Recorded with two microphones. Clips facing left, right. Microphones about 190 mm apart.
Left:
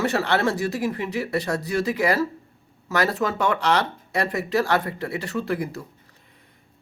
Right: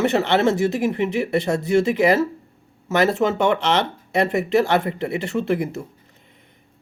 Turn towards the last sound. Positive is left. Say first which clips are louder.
# right 4 dB
turn(degrees=-25)  # may be behind; listen again after turning